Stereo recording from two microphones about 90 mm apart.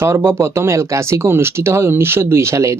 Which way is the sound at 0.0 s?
30° right (ahead or behind).